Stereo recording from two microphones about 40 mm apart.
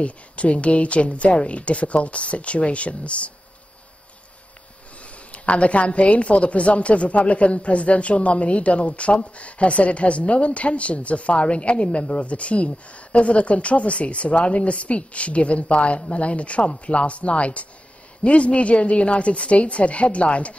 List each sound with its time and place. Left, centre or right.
0.0 s a woman's voice: left
5.0 s a woman's voice: left